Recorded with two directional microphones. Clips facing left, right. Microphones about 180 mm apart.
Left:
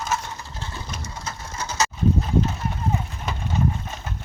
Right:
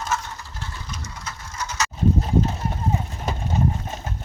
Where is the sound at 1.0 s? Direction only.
30° left (ahead or behind).